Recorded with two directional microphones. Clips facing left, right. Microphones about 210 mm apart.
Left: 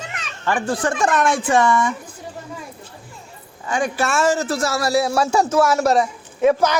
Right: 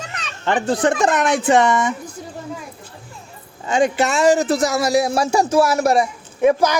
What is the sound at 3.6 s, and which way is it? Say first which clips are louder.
Speech: right 4 dB; 20° right (ahead or behind).